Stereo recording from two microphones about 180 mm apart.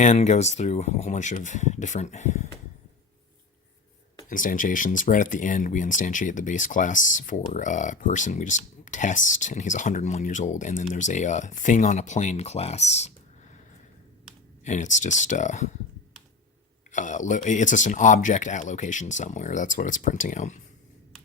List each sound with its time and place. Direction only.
0.0 s speech: 40° left (ahead or behind)
4.3 s speech: 50° left (ahead or behind)
14.6 s speech: 45° left (ahead or behind)
16.9 s speech: 45° left (ahead or behind)